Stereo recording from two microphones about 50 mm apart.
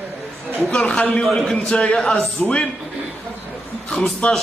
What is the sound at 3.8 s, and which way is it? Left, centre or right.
Speech, centre.